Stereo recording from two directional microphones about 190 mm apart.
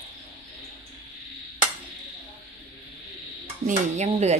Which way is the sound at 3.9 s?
35° right (ahead or behind).